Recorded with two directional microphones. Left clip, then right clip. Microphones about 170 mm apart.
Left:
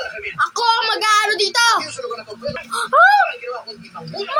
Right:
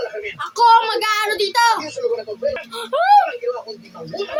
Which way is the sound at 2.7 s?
15° right (ahead or behind).